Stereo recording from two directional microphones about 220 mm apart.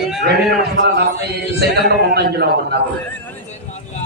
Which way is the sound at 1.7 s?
50° right (ahead or behind).